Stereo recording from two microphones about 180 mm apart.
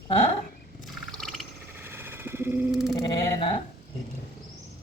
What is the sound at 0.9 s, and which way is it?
Wild animals, centre (ahead or behind).